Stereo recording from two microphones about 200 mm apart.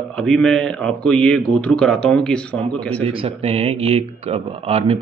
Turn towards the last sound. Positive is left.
turn(degrees=-30)  # may be behind; listen again after turning